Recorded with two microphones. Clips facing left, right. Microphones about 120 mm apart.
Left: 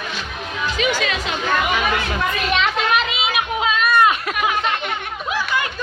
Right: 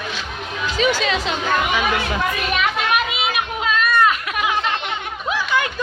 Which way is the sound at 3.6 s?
15° left (ahead or behind).